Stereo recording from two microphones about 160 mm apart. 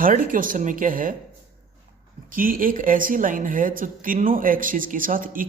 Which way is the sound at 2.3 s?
60° right (ahead or behind).